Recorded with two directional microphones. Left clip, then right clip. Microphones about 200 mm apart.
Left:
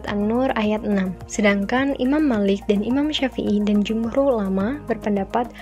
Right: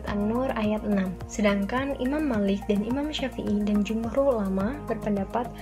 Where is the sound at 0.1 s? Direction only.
50° left (ahead or behind).